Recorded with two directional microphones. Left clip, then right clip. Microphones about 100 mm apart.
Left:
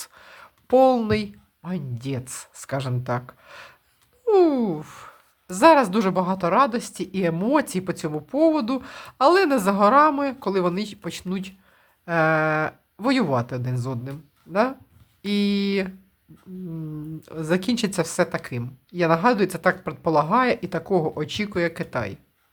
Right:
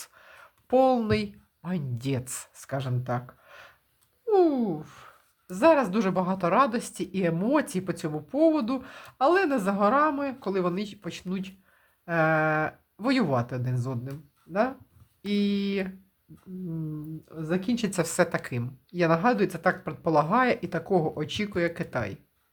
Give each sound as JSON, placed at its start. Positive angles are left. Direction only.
{"t": 0.0, "sound": "a sound", "side_deg": 25}
{"t": 1.6, "sound": "a woman's voice", "side_deg": 0}
{"t": 2.5, "sound": "speech", "side_deg": 20}
{"t": 4.3, "sound": "speech", "side_deg": 50}
{"t": 6.2, "sound": "speech", "side_deg": 15}
{"t": 12.0, "sound": "speech", "side_deg": 20}
{"t": 17.2, "sound": "speech", "side_deg": 55}
{"t": 17.9, "sound": "a woman's voice", "side_deg": 10}
{"t": 19.2, "sound": "speech", "side_deg": 30}